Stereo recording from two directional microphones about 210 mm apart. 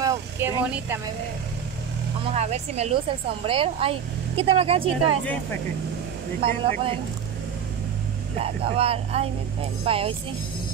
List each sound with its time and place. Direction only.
0.0 s speech: 15° right (ahead or behind)
2.3 s speech: 30° right (ahead or behind)
5.2 s speech: 5° left (ahead or behind)
6.4 s speech: 25° right (ahead or behind)
8.4 s speech: 25° right (ahead or behind)